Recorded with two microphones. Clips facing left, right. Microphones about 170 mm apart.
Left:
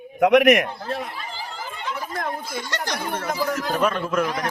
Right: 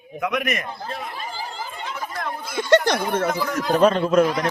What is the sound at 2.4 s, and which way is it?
Speech, 60° right (ahead or behind).